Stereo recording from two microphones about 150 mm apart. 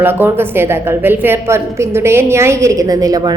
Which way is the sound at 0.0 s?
15° right (ahead or behind).